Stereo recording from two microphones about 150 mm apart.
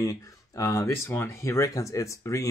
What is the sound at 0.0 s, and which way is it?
Speech, 20° left (ahead or behind).